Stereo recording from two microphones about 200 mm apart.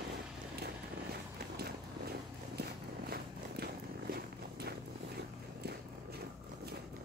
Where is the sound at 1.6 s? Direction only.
50° right (ahead or behind).